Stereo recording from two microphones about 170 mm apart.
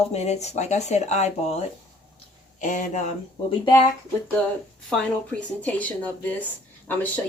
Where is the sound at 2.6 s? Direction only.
50° left (ahead or behind).